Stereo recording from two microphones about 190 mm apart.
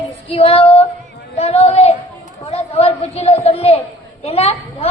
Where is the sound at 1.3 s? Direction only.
35° left (ahead or behind).